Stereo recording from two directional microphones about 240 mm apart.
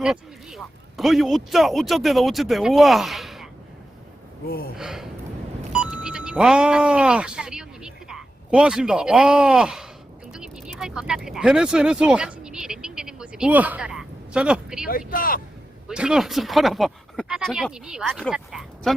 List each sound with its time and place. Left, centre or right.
0.0 s speech: centre
4.8 s speech: centre
5.7 s a sound: centre
14.8 s speech: left
15.9 s speech: centre